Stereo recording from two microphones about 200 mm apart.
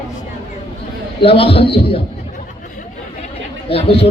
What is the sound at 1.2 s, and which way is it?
Music, 25° left (ahead or behind).